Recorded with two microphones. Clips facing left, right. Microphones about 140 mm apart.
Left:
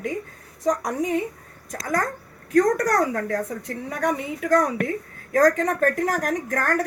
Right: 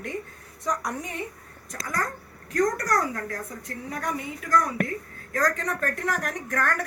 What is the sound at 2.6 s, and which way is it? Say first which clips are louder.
A woman's voice: left 5 dB; 70° left (ahead or behind).